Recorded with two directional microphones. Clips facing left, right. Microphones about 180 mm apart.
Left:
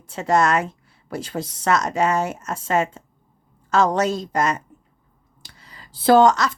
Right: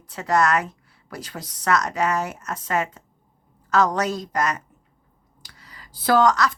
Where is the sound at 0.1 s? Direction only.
25° left (ahead or behind).